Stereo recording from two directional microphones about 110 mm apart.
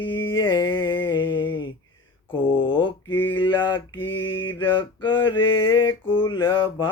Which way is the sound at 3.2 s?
50° left (ahead or behind).